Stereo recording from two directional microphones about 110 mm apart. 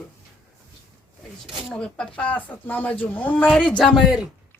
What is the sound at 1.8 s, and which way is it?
Speech, 10° left (ahead or behind).